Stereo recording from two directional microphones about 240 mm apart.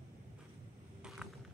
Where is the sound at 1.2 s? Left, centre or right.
Centre.